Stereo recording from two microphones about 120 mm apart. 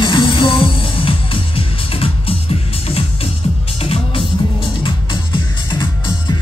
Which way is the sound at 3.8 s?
50° left (ahead or behind).